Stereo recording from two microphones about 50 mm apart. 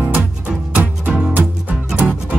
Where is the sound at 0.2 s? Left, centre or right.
Right.